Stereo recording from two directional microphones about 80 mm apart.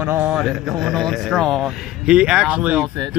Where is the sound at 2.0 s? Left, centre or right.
Centre.